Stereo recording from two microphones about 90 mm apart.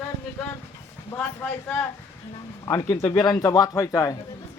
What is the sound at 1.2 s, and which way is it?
Speech, 15° left (ahead or behind).